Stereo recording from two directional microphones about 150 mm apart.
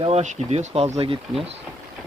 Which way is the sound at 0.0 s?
45° right (ahead or behind).